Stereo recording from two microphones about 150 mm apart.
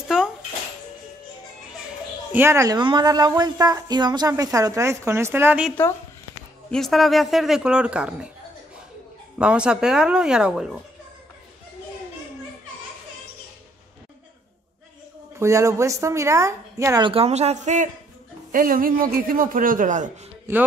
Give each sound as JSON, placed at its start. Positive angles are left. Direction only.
{"t": 0.1, "sound": "music", "side_deg": -5}
{"t": 2.3, "sound": "speech", "side_deg": -15}
{"t": 6.7, "sound": "speech", "side_deg": 0}
{"t": 9.4, "sound": "speech", "side_deg": -5}
{"t": 15.3, "sound": "speech", "side_deg": -20}
{"t": 17.0, "sound": "speech", "side_deg": -40}
{"t": 18.5, "sound": "a man's voice", "side_deg": -65}
{"t": 20.5, "sound": "speech", "side_deg": -20}